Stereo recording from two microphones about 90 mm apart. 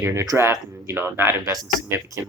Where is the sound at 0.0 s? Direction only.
35° right (ahead or behind).